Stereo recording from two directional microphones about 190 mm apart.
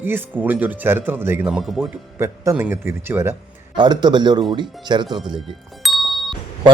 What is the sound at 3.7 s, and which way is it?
A man's voice, 25° right (ahead or behind).